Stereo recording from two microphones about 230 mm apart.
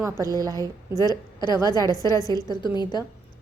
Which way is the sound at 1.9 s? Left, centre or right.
Centre.